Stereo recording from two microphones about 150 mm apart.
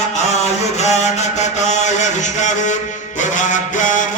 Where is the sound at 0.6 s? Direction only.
50° left (ahead or behind).